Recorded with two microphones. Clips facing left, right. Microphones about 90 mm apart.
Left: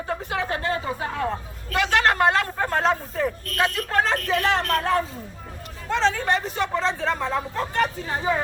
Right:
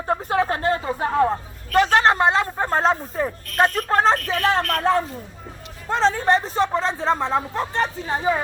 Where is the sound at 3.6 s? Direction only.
45° right (ahead or behind); by 8.3 s 25° right (ahead or behind).